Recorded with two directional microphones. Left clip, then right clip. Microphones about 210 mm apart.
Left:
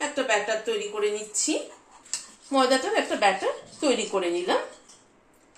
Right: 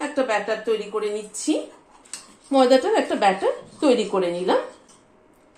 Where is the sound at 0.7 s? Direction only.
20° right (ahead or behind).